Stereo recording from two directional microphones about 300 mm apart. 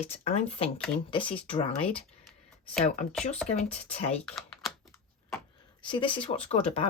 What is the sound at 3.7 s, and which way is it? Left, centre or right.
Speech, left.